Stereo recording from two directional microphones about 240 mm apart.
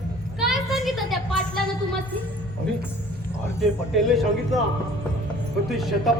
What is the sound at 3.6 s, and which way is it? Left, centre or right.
Speech, centre.